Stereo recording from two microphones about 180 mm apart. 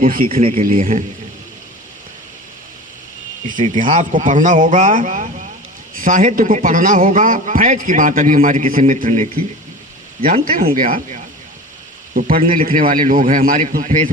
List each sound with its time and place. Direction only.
0.0 s a man's voice: 50° right (ahead or behind)
0.3 s speech: 35° right (ahead or behind)
3.5 s a man's voice: 45° right (ahead or behind)
10.8 s a man's voice: 45° right (ahead or behind)